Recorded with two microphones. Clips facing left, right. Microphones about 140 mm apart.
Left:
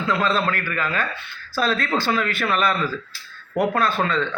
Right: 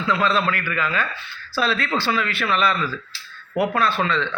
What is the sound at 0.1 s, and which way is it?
A man's voice, 40° left (ahead or behind).